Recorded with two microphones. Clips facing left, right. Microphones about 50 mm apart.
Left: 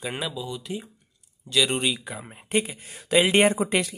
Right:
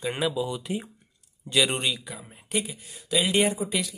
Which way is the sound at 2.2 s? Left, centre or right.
Left.